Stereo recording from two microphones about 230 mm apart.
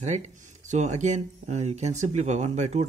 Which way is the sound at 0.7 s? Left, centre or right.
Right.